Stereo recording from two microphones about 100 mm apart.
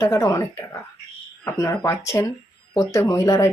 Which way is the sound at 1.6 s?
30° left (ahead or behind).